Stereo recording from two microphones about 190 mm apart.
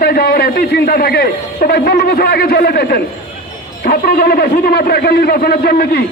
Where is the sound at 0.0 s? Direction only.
55° left (ahead or behind).